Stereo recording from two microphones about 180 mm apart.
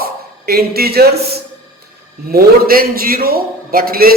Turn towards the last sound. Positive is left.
turn(degrees=-55)  # may be behind; listen again after turning